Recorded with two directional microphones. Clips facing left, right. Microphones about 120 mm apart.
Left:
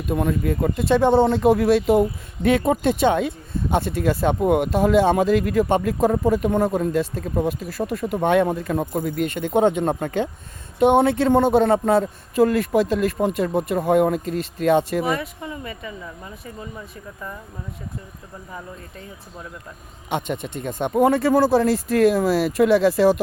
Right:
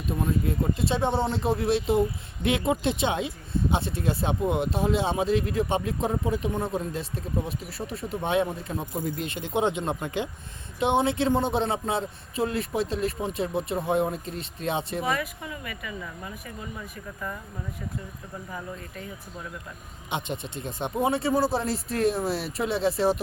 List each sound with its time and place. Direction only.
0.1 s speech: 65° left (ahead or behind)
6.4 s speech: 65° left (ahead or behind)
6.7 s speech: 50° left (ahead or behind)
7.9 s speech: 65° left (ahead or behind); by 12.0 s 45° left (ahead or behind)
12.4 s speech: 70° left (ahead or behind)
15.1 s speech: 25° left (ahead or behind)
20.1 s speech: 55° left (ahead or behind)
21.3 s speech: 90° left